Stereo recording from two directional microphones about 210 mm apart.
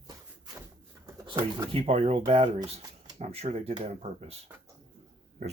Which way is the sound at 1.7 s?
30° right (ahead or behind).